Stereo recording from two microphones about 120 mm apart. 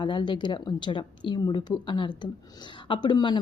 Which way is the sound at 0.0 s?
40° left (ahead or behind).